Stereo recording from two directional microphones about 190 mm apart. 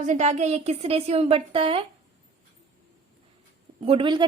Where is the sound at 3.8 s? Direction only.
30° right (ahead or behind).